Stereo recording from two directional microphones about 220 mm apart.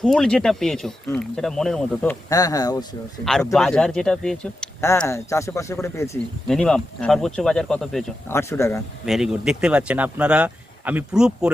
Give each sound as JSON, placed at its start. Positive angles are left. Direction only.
{"t": 0.0, "sound": "speech", "side_deg": 5}
{"t": 2.3, "sound": "speech", "side_deg": 15}
{"t": 3.2, "sound": "speech", "side_deg": 0}
{"t": 8.3, "sound": "speech", "side_deg": 10}
{"t": 9.0, "sound": "speech", "side_deg": 0}